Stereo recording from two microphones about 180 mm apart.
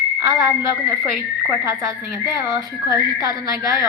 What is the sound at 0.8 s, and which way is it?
Speech, 15° right (ahead or behind).